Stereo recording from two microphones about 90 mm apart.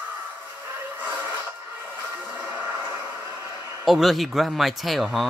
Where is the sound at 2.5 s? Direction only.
20° right (ahead or behind).